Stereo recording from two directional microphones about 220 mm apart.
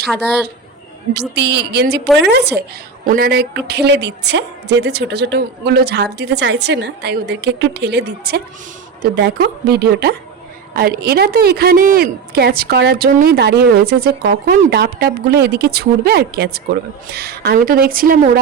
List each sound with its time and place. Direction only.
0.0 s a woman's voice: centre (ahead or behind)
1.4 s a woman's voice: 50° right (ahead or behind)